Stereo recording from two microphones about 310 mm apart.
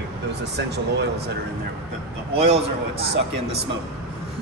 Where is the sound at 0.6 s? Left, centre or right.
Right.